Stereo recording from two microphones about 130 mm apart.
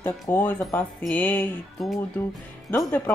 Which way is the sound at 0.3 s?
15° left (ahead or behind).